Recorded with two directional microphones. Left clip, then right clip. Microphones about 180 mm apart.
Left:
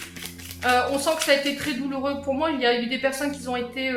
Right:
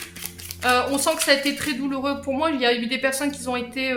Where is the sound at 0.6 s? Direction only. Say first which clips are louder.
Right 1 dB; 30° right (ahead or behind).